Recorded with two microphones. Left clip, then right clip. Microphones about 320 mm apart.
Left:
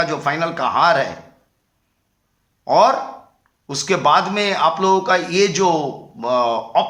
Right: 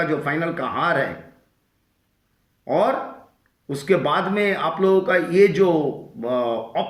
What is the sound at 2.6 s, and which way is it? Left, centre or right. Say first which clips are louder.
A man's voice: left 6 dB; left.